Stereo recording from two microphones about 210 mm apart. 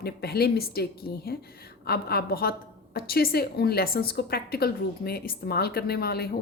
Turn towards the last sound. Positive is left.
turn(degrees=50)  # may be behind; listen again after turning